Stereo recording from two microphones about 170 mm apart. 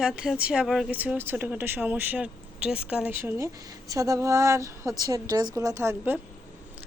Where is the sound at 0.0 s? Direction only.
Centre (ahead or behind).